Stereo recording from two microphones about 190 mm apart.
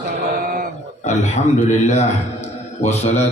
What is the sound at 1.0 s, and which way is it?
A man's voice, 40° left (ahead or behind).